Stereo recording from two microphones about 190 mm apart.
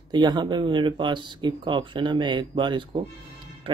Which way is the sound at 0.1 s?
20° right (ahead or behind).